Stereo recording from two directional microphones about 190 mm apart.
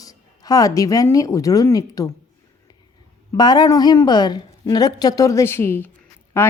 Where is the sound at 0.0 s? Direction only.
20° left (ahead or behind).